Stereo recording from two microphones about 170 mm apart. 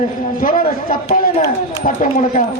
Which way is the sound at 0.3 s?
55° left (ahead or behind).